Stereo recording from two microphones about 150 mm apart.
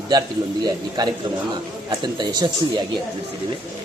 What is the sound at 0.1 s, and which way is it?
A man's voice, 25° right (ahead or behind).